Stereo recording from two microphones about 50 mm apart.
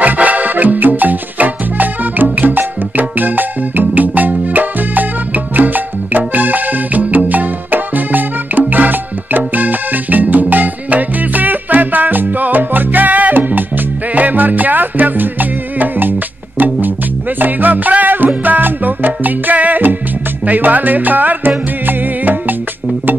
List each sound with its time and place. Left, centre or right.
0.0 s music: right